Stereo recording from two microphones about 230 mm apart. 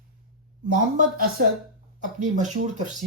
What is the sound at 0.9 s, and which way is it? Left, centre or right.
Speech, right.